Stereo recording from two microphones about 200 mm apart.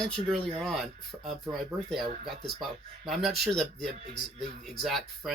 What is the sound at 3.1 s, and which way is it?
Speech, centre (ahead or behind).